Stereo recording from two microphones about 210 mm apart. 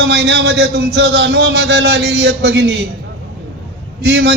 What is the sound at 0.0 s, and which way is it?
A man's voice, 55° right (ahead or behind).